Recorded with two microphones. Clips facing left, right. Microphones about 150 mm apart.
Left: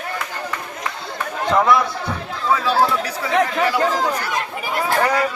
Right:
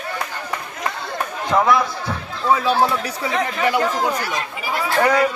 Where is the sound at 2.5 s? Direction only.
20° right (ahead or behind).